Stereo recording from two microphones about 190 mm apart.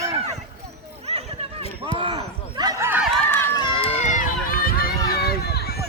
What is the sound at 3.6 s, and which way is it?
Run, 25° left (ahead or behind).